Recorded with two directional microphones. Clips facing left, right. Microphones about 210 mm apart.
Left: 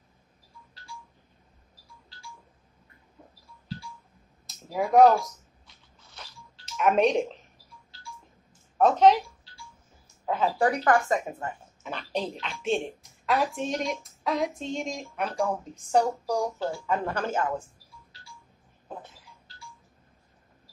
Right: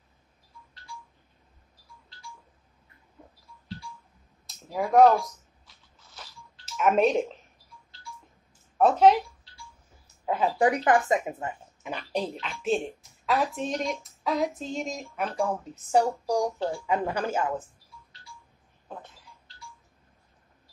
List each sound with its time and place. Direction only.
4.5 s speech: centre (ahead or behind)
6.6 s speech: 5° right (ahead or behind)
8.7 s speech: 5° right (ahead or behind)
10.2 s a woman's voice: 10° right (ahead or behind)